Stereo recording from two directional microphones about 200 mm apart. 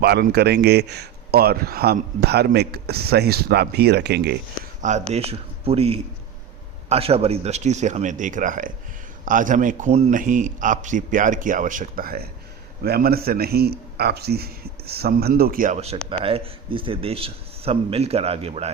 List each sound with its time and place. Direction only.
0.0 s speech: 55° right (ahead or behind)
4.8 s a man's voice: 35° right (ahead or behind)